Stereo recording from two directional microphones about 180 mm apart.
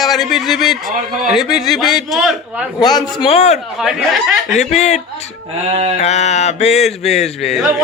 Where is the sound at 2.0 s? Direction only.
Centre (ahead or behind).